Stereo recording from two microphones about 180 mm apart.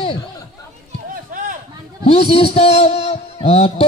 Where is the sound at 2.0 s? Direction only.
30° left (ahead or behind).